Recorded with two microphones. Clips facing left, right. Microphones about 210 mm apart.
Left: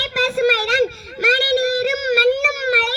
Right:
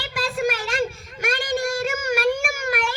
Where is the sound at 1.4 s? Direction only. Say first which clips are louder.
Left 7 dB; 70° left (ahead or behind).